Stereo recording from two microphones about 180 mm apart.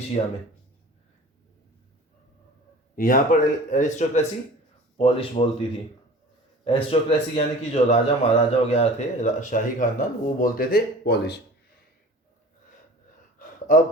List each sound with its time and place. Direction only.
0.2 s speech: 35° left (ahead or behind)
2.9 s speech: 50° left (ahead or behind); by 5.6 s 30° left (ahead or behind)
6.7 s speech: 30° left (ahead or behind); by 11.3 s 65° left (ahead or behind)